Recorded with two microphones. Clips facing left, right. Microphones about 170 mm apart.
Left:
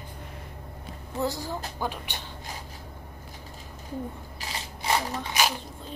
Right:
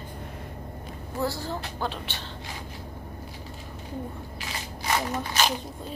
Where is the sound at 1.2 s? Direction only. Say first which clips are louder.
Even; 15° left (ahead or behind).